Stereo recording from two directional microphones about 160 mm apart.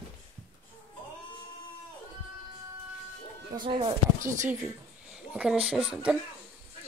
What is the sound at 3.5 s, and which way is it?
Speech, 20° right (ahead or behind).